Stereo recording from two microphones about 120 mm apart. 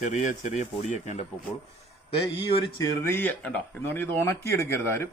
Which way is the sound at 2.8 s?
20° left (ahead or behind).